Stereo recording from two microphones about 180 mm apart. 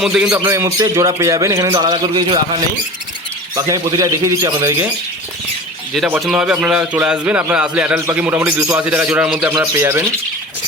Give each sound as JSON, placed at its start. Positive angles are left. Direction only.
{"t": 0.0, "sound": "speech", "side_deg": 0}
{"t": 0.3, "sound": "a man's voice", "side_deg": -15}
{"t": 5.9, "sound": "a man's voice", "side_deg": 0}